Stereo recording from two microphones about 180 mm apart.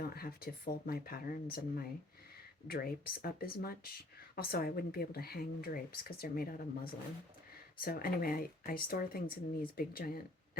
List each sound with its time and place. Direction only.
0.1 s speech: 60° left (ahead or behind)